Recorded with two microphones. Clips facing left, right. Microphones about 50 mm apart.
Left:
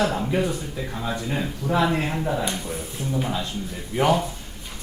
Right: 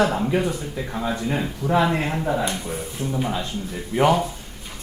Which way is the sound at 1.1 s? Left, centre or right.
Right.